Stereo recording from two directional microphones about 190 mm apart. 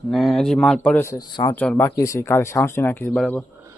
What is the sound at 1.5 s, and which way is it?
Speech, 5° left (ahead or behind).